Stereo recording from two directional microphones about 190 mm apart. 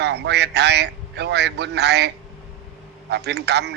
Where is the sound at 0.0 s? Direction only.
60° right (ahead or behind).